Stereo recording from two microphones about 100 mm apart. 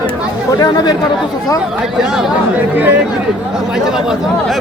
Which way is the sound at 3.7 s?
5° right (ahead or behind).